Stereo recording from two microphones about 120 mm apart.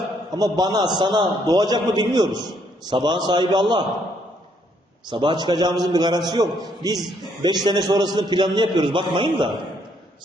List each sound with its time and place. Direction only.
0.3 s a man's voice: 35° right (ahead or behind)
5.0 s a man's voice: 40° right (ahead or behind)